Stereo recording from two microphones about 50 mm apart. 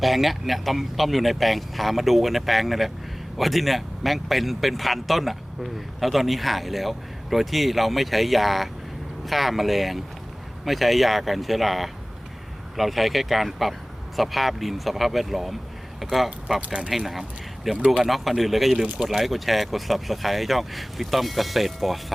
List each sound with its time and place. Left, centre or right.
0.0 s speech: centre
16.6 s speech: right
18.0 s speech: centre